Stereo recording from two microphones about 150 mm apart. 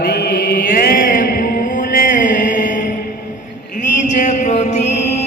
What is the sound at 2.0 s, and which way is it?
Mantra, 65° left (ahead or behind).